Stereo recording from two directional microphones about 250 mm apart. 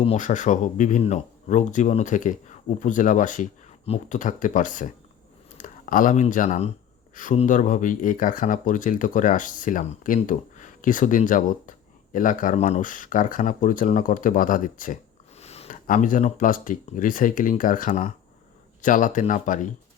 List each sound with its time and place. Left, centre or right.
0.0 s speech: left